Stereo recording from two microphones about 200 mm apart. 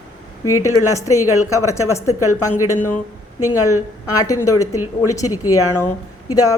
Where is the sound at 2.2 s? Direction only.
90° left.